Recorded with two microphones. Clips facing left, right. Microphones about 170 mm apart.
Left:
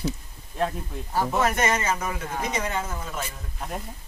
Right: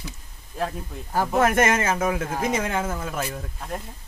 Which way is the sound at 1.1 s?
50° right (ahead or behind).